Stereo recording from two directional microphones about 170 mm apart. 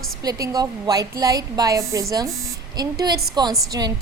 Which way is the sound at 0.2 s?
20° right (ahead or behind).